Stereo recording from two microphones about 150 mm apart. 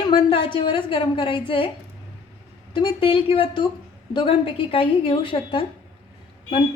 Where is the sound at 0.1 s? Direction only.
35° left (ahead or behind).